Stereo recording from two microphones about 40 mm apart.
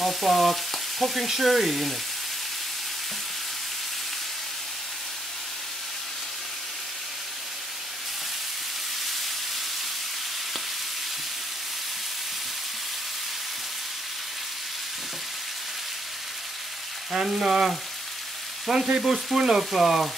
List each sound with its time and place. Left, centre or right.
0.0 s frying: centre
17.1 s frying: centre